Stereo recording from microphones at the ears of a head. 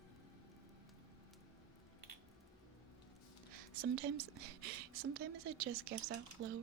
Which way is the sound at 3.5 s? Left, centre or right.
Right.